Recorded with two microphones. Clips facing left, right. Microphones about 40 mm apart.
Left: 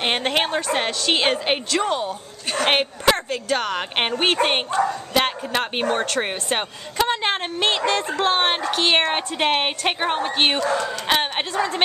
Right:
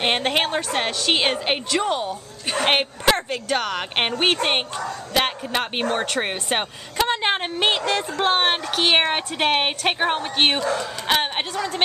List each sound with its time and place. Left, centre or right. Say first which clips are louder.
0.0 s a woman's voice: even; centre